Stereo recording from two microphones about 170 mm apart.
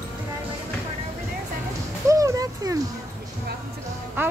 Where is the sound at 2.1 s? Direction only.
20° right (ahead or behind).